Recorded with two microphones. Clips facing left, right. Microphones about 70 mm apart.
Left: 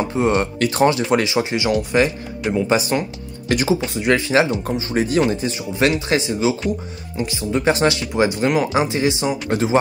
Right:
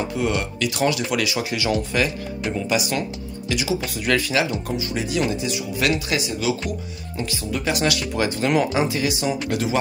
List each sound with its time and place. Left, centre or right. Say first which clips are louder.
0.1 s speech: left 5 dB; left
3.8 s speech: left 4 dB; left
8.0 s speech: left 4 dB; left